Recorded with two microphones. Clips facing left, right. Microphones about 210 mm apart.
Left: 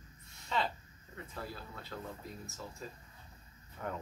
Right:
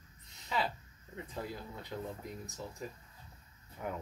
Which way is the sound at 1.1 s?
20° right (ahead or behind).